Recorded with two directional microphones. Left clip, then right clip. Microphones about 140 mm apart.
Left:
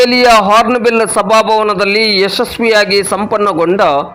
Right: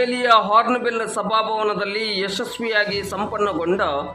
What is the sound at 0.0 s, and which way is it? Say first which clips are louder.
A man's voice: left 9 dB; 50° left (ahead or behind).